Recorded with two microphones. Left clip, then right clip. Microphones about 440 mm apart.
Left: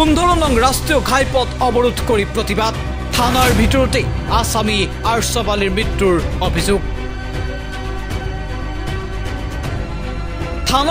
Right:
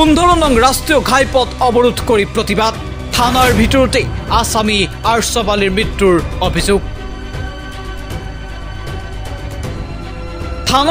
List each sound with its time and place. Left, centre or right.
0.0 s speech: left
3.3 s speech: centre
3.6 s speech: left
10.6 s music: left